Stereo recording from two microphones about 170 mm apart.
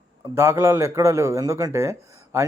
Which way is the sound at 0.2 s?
15° right (ahead or behind).